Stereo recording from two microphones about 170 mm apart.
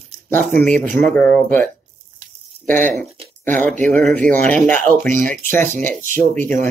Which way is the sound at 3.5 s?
10° left (ahead or behind).